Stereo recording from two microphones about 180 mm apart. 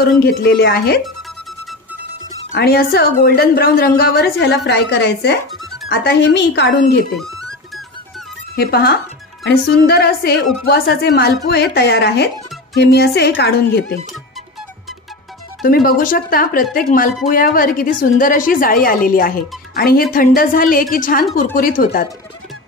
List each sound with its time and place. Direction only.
0.0 s a woman's voice: 65° left (ahead or behind)
2.5 s a woman's voice: 60° left (ahead or behind)
7.2 s music: centre (ahead or behind)
8.5 s a woman's voice: 60° left (ahead or behind)
15.6 s speech: 55° left (ahead or behind)